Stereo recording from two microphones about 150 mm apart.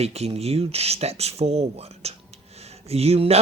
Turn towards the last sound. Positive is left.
turn(degrees=-40)  # may be behind; listen again after turning